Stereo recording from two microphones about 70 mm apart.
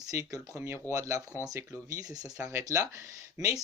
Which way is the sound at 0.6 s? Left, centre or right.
Right.